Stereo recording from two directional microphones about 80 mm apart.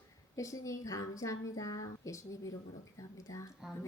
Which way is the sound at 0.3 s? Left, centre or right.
Left.